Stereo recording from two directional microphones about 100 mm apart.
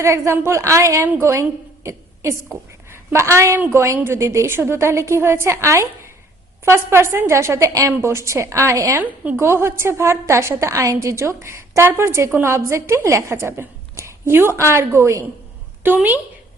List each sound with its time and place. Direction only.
0.0 s a woman's voice: 30° right (ahead or behind)